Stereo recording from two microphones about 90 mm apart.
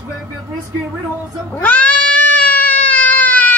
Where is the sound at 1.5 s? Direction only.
20° left (ahead or behind).